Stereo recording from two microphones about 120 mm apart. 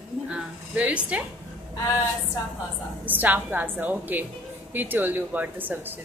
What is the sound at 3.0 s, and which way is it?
A woman's voice, 15° right (ahead or behind).